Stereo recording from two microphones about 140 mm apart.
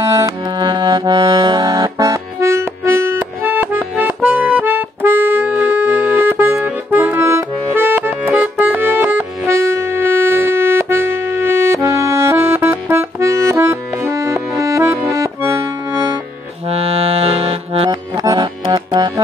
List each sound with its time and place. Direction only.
0.2 s accordion: 30° right (ahead or behind); by 9.2 s 15° right (ahead or behind)
9.5 s music: 20° right (ahead or behind)
14.6 s accordion: 20° right (ahead or behind)
16.6 s accordion: 45° right (ahead or behind)
18.1 s music: 25° right (ahead or behind)